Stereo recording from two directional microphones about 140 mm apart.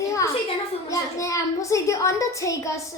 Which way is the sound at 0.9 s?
20° left (ahead or behind).